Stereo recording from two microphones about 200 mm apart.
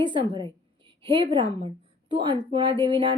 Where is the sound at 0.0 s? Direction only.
25° right (ahead or behind).